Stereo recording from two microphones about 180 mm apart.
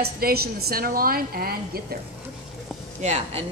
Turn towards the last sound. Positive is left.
turn(degrees=-35)  # may be behind; listen again after turning